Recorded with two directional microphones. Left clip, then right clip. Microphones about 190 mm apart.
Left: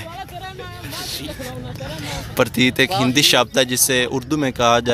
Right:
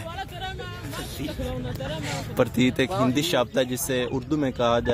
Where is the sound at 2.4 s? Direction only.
5° left (ahead or behind).